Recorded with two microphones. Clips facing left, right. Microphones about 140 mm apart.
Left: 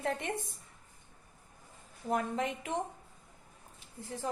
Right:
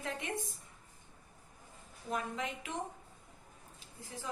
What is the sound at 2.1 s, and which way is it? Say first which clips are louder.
Speech: left 5 dB; 50° left (ahead or behind).